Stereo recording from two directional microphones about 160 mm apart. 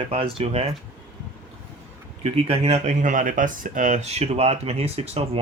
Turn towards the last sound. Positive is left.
turn(degrees=-40)  # may be behind; listen again after turning